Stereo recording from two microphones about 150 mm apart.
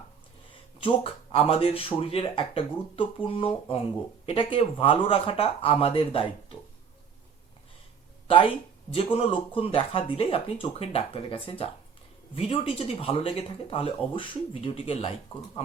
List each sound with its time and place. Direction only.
0.8 s speech: 35° left (ahead or behind)
9.1 s speech: 40° left (ahead or behind)